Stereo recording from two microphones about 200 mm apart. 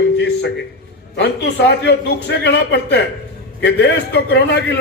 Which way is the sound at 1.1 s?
55° left (ahead or behind).